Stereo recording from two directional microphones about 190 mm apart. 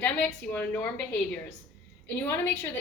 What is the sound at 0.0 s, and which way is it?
A woman's voice, 5° left (ahead or behind).